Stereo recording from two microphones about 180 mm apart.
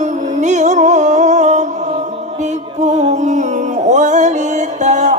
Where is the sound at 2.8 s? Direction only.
40° right (ahead or behind).